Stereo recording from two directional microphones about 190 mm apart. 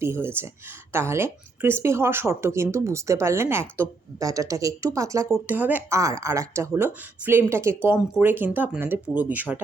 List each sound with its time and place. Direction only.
0.0 s speech: 10° right (ahead or behind)